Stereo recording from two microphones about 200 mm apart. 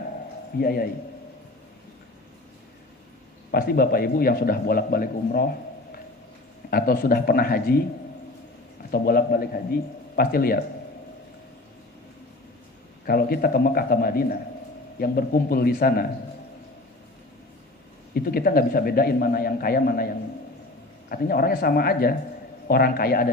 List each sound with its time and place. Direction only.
0.6 s a man's voice: 50° left (ahead or behind)
3.5 s a man's voice: 50° left (ahead or behind)
6.7 s a man's voice: 50° left (ahead or behind)
8.9 s a man's voice: 50° left (ahead or behind)
13.1 s a man's voice: 50° left (ahead or behind)
18.1 s a man's voice: 50° left (ahead or behind)
21.1 s a man's voice: 50° left (ahead or behind)